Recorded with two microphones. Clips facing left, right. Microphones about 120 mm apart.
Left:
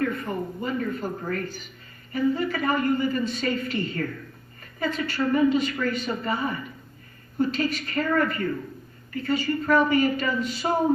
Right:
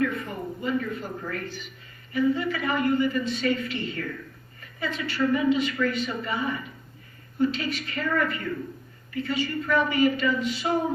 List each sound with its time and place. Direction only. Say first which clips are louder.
0.0 s a man's voice: left 1 dB; 40° left (ahead or behind)